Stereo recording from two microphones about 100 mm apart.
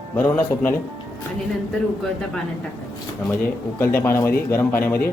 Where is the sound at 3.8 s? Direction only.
20° left (ahead or behind).